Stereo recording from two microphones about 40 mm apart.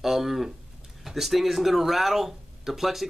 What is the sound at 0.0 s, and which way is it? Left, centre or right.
Speech, centre.